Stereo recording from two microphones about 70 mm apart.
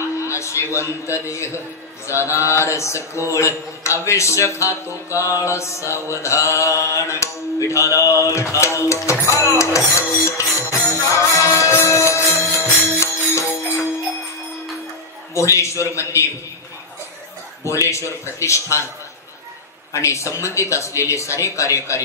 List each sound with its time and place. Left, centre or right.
0.2 s a man's voice: left
10.7 s music: left
15.3 s speech: left
17.6 s speech: left
19.9 s speech: left